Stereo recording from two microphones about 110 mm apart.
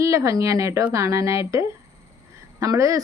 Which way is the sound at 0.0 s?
30° right (ahead or behind).